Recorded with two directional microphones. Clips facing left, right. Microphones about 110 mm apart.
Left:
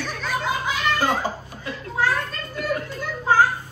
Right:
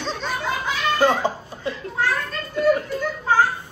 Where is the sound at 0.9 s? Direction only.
20° right (ahead or behind).